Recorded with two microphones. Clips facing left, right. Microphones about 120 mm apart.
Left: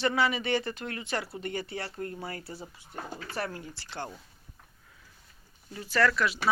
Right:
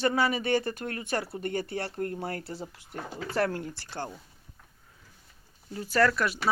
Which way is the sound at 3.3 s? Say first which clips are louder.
Right 8 dB; 70° right (ahead or behind).